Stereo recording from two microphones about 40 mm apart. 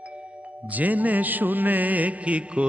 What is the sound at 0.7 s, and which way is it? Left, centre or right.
Music, right.